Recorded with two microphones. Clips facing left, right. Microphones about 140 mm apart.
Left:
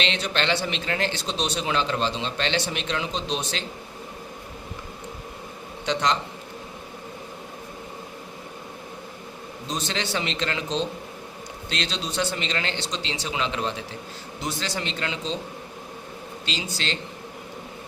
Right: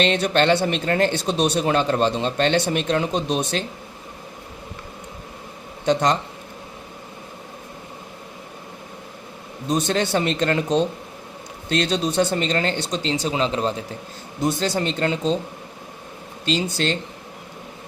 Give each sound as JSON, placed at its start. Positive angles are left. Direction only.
{"t": 0.0, "sound": "speech", "side_deg": -50}
{"t": 5.8, "sound": "speech", "side_deg": -50}
{"t": 9.6, "sound": "speech", "side_deg": -55}
{"t": 16.5, "sound": "speech", "side_deg": -50}